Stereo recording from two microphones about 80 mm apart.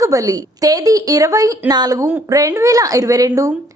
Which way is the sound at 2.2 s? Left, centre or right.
Right.